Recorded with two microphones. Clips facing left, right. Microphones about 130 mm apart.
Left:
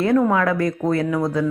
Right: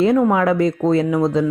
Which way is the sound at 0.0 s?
15° right (ahead or behind).